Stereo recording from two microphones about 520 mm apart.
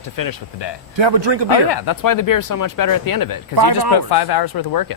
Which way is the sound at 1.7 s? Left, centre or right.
Left.